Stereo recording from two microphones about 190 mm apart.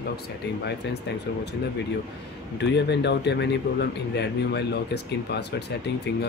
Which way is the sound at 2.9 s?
65° left (ahead or behind).